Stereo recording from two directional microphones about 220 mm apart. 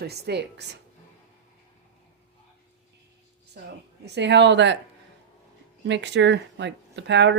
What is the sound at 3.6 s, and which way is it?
Speech, 45° right (ahead or behind).